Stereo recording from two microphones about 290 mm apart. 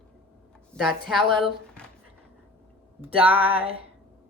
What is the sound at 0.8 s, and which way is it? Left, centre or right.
A woman's voice, centre.